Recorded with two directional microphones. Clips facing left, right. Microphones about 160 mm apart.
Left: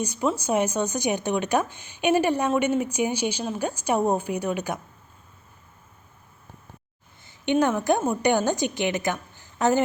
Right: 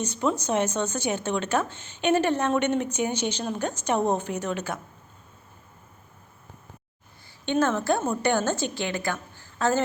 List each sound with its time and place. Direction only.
0.0 s speech: 10° left (ahead or behind)
7.3 s a woman's voice: 15° left (ahead or behind)